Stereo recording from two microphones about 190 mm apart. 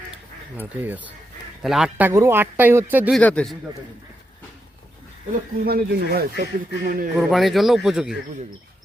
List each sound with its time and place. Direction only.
0.5 s a man's voice: 10° right (ahead or behind)
3.2 s speech: 5° left (ahead or behind)
5.6 s speech: 55° right (ahead or behind)
7.2 s speech: centre (ahead or behind)